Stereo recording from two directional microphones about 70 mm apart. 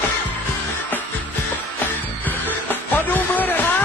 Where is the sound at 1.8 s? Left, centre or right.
Left.